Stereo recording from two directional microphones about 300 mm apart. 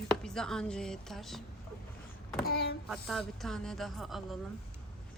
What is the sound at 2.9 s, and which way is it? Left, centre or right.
Speech, centre.